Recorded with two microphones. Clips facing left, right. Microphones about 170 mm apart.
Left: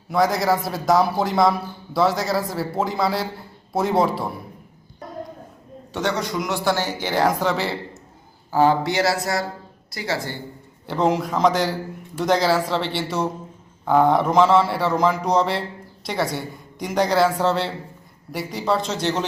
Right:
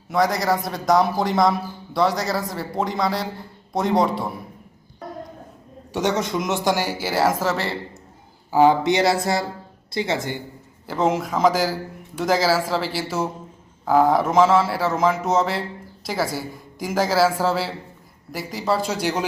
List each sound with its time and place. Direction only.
0.1 s a man's voice: centre (ahead or behind)
5.9 s speech: 15° right (ahead or behind); by 7.8 s centre (ahead or behind)
8.4 s speech: 15° right (ahead or behind)
10.8 s a man's voice: centre (ahead or behind)